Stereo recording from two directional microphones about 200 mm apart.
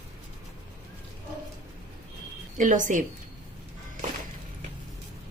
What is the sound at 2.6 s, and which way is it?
Speech, 40° right (ahead or behind).